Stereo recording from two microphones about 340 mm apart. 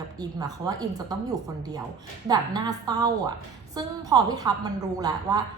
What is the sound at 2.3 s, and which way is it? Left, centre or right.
A woman's voice, centre.